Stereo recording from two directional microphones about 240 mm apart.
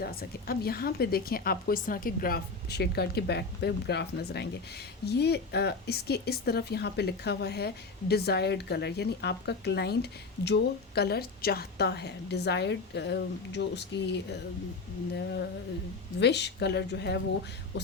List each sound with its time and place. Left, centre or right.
0.0 s a woman's voice: left